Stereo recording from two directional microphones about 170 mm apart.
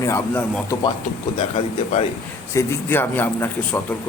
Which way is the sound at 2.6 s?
15° left (ahead or behind).